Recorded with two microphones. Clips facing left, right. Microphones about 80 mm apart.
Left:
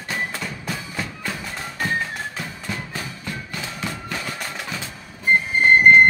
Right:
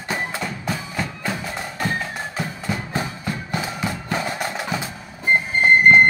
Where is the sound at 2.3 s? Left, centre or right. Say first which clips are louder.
Right 4 dB; centre.